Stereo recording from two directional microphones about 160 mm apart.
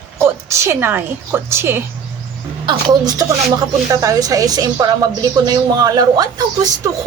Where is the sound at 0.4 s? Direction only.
15° right (ahead or behind).